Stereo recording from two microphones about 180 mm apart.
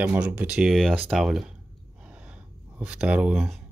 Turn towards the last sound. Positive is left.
turn(degrees=-5)  # may be behind; listen again after turning